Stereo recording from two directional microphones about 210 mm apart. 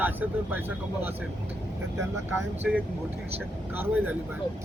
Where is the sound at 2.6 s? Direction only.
5° right (ahead or behind).